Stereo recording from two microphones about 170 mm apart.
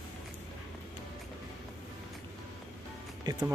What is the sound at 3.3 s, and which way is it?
Speech, 25° right (ahead or behind).